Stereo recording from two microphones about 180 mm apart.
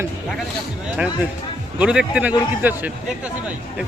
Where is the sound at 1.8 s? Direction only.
5° right (ahead or behind).